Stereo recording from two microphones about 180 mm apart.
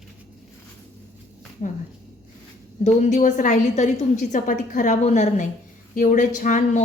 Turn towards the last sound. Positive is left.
turn(degrees=45)  # may be behind; listen again after turning